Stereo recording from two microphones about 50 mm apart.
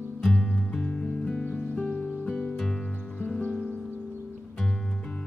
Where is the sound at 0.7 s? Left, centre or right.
Centre.